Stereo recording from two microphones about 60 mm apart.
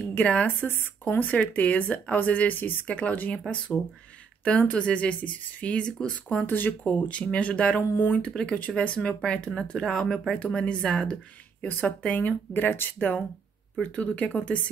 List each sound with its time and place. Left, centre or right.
0.1 s speech: left
6.4 s speech: left; by 10.4 s centre
10.5 s speech: centre
11.8 s speech: left
13.9 s speech: left